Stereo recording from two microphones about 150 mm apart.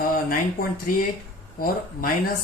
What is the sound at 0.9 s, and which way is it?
Speech, 70° left (ahead or behind).